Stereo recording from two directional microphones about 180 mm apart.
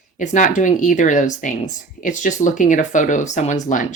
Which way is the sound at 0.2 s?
45° left (ahead or behind).